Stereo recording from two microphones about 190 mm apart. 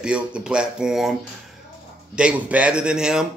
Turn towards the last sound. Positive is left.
turn(degrees=-5)  # may be behind; listen again after turning